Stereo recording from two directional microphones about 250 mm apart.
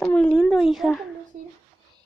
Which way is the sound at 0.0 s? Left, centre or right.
Centre.